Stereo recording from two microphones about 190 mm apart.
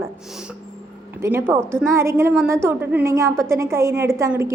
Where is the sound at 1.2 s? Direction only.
10° right (ahead or behind).